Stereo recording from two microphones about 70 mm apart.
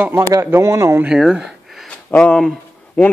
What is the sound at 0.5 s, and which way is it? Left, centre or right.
Speech, right.